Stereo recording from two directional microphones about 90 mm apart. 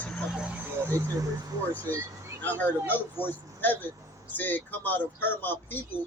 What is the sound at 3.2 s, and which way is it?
Speech, 20° left (ahead or behind).